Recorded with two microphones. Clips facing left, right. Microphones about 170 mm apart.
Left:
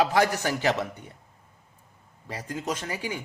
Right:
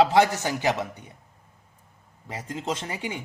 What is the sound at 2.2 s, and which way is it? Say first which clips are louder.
Speech: right 1 dB; 25° right (ahead or behind).